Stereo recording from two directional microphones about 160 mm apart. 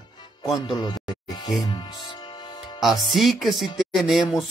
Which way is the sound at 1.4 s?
25° left (ahead or behind).